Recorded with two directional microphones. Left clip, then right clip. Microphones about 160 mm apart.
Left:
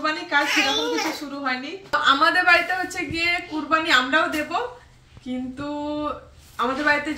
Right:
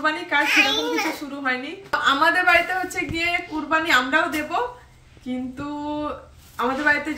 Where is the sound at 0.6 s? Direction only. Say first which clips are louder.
Right 2 dB; 25° left (ahead or behind).